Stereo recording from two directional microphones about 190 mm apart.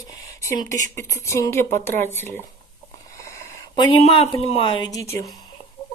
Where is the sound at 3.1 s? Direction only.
15° left (ahead or behind).